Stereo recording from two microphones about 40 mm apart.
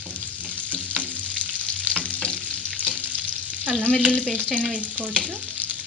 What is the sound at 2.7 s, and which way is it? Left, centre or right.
Frying, right.